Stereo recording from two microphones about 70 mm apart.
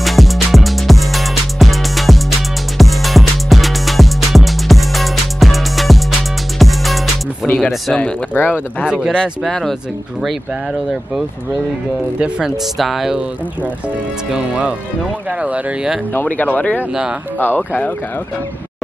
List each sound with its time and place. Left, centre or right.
0.0 s music: centre
7.5 s speech: centre
8.3 s speech: left
8.8 s speech: centre
9.4 s speech: centre
10.2 s speech: centre
14.3 s speech: centre
16.1 s speech: left